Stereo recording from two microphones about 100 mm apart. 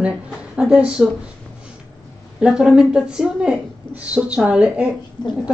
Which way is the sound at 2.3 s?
10° right (ahead or behind).